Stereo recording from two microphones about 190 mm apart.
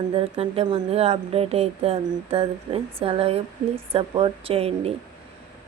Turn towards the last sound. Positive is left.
turn(degrees=-30)  # may be behind; listen again after turning